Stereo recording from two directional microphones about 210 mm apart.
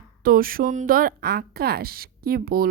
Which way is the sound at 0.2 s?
45° right (ahead or behind).